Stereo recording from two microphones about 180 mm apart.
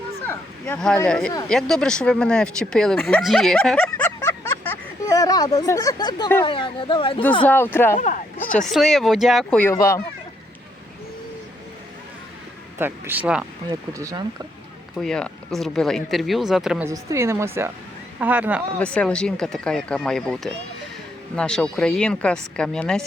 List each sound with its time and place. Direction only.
0.3 s a sound: 10° left (ahead or behind)
1.0 s speech: 5° left (ahead or behind); by 7.2 s 30° left (ahead or behind)
7.4 s speech: 10° left (ahead or behind)
7.9 s speech: 45° left (ahead or behind)
8.5 s speech: centre (ahead or behind)
12.8 s a woman's voice: 10° right (ahead or behind)
13.7 s speech: 20° right (ahead or behind)
14.9 s speech: 5° left (ahead or behind)
16.8 s a woman's voice: 15° right (ahead or behind)
18.8 s speech: 5° left (ahead or behind)